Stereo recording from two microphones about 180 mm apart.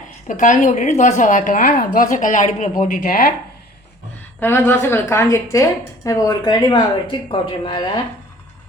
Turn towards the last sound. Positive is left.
turn(degrees=25)  # may be behind; listen again after turning